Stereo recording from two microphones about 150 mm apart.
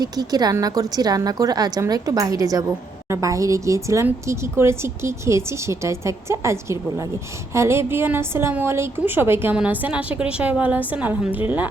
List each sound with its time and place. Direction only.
0.0 s a woman's voice: 25° right (ahead or behind); by 11.7 s 10° right (ahead or behind)